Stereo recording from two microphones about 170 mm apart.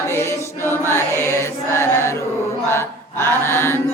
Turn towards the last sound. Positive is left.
turn(degrees=15)  # may be behind; listen again after turning